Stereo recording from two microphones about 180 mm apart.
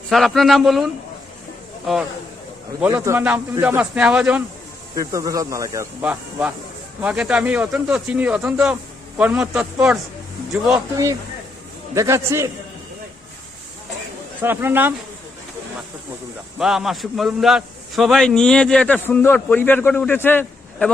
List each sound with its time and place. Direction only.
0.1 s a man's voice: centre (ahead or behind)
1.9 s a man's voice: centre (ahead or behind)
2.8 s speech: 15° right (ahead or behind)
4.9 s speech: 20° right (ahead or behind)
11.9 s speech: 15° right (ahead or behind)
14.4 s speech: 10° right (ahead or behind)
16.6 s a man's voice: centre (ahead or behind)